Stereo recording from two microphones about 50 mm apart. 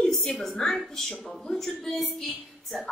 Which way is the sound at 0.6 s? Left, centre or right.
Centre.